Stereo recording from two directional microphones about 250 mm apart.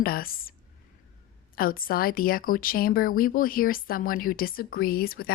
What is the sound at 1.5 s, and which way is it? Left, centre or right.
A woman's voice, left.